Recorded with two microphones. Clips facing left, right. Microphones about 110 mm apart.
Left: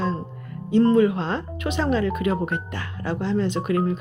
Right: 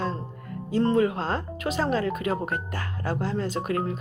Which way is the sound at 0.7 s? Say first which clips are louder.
Left 5 dB; 35° right (ahead or behind).